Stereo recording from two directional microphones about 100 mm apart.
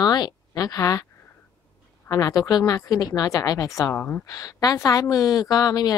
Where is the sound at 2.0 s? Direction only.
40° left (ahead or behind).